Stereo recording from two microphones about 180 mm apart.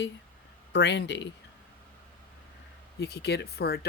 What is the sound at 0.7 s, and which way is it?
Speech, 75° left (ahead or behind).